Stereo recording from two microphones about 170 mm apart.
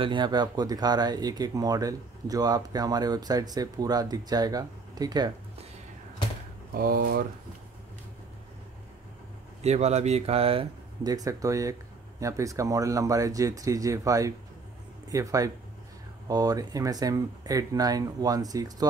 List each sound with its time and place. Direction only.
0.0 s speech: 25° right (ahead or behind)
6.7 s speech: 60° right (ahead or behind)
9.6 s speech: 40° right (ahead or behind)
11.1 s speech: 20° right (ahead or behind)